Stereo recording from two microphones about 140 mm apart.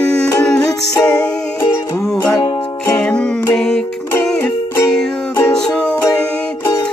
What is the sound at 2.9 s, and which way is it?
Music, 10° left (ahead or behind).